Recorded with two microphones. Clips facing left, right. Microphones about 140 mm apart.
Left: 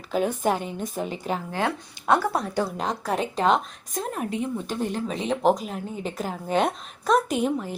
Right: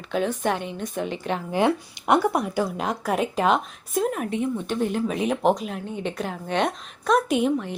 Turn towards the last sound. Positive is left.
turn(degrees=0)  # may be behind; listen again after turning